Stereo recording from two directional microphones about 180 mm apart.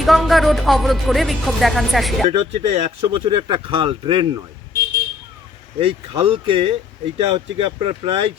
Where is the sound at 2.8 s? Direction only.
30° right (ahead or behind).